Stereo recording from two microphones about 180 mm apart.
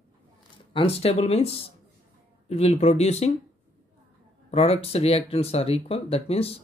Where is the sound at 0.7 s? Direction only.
30° left (ahead or behind).